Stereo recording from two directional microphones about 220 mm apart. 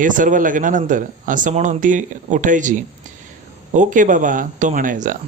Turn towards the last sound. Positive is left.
turn(degrees=-35)  # may be behind; listen again after turning